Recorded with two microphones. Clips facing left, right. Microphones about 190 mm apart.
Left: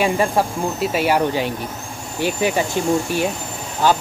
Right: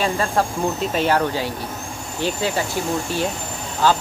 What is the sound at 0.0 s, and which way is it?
Speech, 10° left (ahead or behind).